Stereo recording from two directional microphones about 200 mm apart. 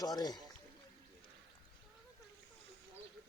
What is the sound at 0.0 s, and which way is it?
Speech, 20° left (ahead or behind).